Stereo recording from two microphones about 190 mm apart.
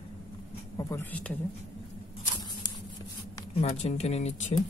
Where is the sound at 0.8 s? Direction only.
15° left (ahead or behind).